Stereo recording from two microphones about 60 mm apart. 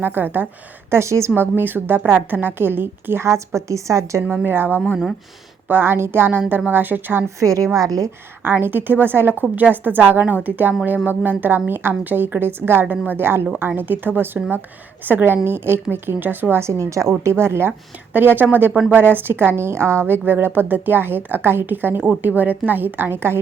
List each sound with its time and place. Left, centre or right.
0.0 s a woman's voice: right
0.9 s a woman's voice: right
1.4 s a woman's voice: right
3.2 s a woman's voice: right
4.3 s a woman's voice: right
5.8 s a woman's voice: right
7.3 s a woman's voice: right
8.4 s a woman's voice: right
18.1 s a woman's voice: right
18.7 s speech: centre
18.9 s a woman's voice: right